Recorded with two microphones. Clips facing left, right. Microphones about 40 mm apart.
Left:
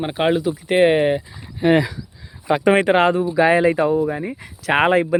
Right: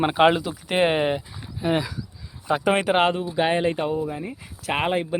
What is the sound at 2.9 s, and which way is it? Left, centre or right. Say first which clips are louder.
Speech: left 4 dB; left.